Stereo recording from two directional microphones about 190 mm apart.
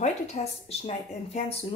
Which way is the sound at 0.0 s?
35° left (ahead or behind).